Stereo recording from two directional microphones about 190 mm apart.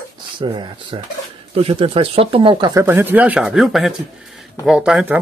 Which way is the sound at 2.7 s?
10° right (ahead or behind).